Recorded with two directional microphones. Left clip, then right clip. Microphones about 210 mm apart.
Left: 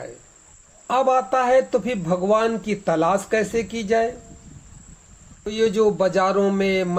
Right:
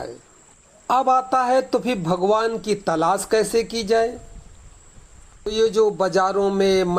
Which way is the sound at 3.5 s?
30° right (ahead or behind).